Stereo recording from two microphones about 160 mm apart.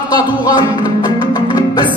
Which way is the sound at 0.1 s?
25° left (ahead or behind).